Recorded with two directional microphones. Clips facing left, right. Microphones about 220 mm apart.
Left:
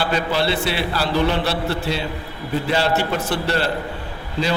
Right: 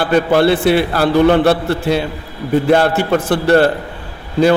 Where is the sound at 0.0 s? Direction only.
55° right (ahead or behind).